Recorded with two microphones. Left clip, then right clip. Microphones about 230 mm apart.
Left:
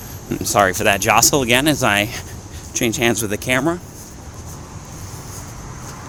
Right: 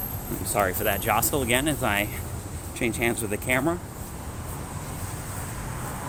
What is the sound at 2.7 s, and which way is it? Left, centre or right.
Speech, left.